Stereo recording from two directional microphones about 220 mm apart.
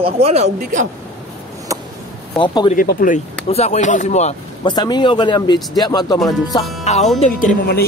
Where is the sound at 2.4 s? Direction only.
20° left (ahead or behind).